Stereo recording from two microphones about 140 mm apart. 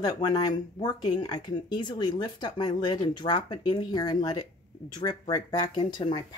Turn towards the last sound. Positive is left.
turn(degrees=35)  # may be behind; listen again after turning